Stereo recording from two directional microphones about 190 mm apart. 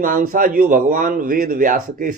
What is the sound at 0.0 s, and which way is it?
A man's voice, 45° right (ahead or behind).